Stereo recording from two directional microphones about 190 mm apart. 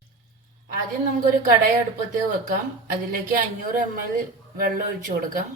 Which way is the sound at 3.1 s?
45° right (ahead or behind).